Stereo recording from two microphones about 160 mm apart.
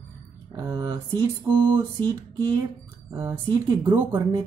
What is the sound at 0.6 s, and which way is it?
Speech, 25° right (ahead or behind).